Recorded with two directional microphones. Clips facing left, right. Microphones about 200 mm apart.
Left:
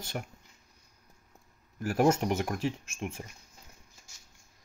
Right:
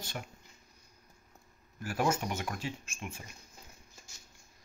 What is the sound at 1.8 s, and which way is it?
Speech, 45° left (ahead or behind).